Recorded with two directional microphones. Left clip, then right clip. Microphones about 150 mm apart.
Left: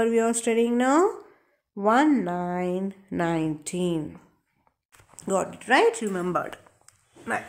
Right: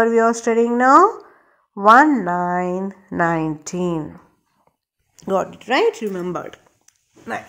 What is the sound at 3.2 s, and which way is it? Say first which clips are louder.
Speech: right 7 dB; 10° right (ahead or behind).